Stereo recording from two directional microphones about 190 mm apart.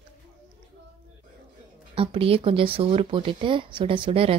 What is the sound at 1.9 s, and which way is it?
Speech, 30° right (ahead or behind).